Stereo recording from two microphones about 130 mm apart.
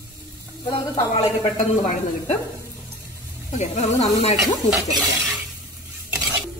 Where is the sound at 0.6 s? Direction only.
45° left (ahead or behind).